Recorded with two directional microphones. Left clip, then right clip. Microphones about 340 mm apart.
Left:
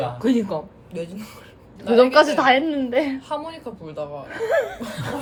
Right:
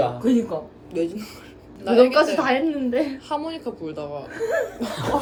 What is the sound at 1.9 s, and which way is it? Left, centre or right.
A woman's voice, centre.